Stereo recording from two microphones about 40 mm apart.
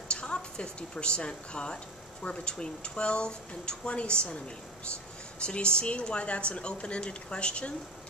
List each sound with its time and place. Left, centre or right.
0.1 s a woman's voice: left
5.4 s speech: left